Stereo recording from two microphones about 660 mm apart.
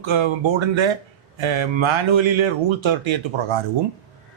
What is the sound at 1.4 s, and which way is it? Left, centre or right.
Speech, right.